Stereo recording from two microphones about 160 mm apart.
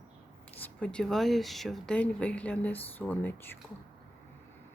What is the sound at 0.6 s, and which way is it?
Speech, 5° left (ahead or behind).